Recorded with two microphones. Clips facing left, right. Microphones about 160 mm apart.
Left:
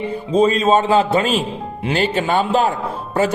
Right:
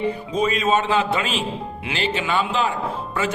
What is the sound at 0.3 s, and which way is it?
A man's voice, 30° left (ahead or behind).